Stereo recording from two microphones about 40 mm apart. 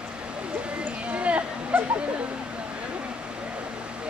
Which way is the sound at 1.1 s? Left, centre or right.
Right.